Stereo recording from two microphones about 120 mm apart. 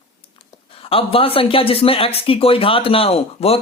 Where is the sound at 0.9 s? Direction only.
50° left (ahead or behind).